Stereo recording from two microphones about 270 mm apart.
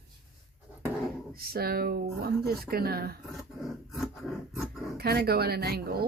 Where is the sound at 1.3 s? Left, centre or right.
Right.